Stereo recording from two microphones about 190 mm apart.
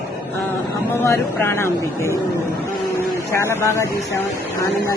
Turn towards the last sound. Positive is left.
turn(degrees=15)  # may be behind; listen again after turning